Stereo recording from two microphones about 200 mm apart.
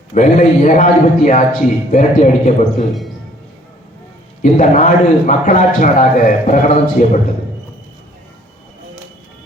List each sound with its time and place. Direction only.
0.1 s a man's voice: 40° left (ahead or behind)
4.4 s a man's voice: 40° left (ahead or behind)